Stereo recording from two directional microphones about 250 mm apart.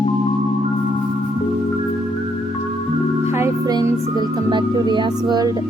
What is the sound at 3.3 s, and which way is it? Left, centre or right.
Music, centre.